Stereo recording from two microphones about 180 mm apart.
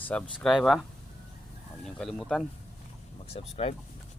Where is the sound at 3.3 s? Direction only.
35° left (ahead or behind).